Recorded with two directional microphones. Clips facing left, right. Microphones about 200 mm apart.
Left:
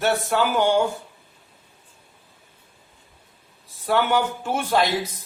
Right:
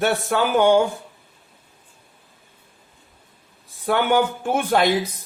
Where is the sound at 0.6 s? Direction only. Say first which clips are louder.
Right 5 dB; 55° right (ahead or behind).